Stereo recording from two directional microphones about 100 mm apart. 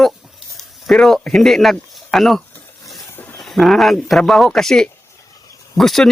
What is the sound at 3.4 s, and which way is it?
Speech, centre (ahead or behind).